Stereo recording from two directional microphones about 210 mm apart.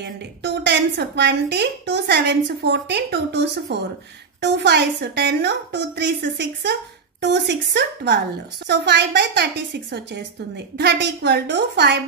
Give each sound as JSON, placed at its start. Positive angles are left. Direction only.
{"t": 0.0, "sound": "a woman's voice", "side_deg": -55}